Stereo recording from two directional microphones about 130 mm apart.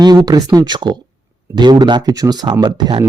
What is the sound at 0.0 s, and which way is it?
Speech, 30° right (ahead or behind).